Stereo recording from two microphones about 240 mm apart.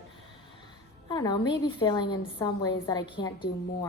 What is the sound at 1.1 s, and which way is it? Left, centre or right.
A woman's voice, centre.